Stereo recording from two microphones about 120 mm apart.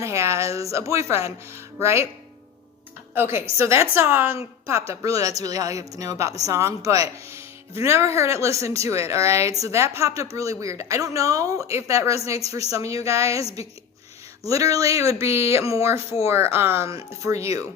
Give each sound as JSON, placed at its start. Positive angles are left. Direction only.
{"t": 0.0, "sound": "speech", "side_deg": -25}
{"t": 3.2, "sound": "speech", "side_deg": -20}
{"t": 14.4, "sound": "speech", "side_deg": -25}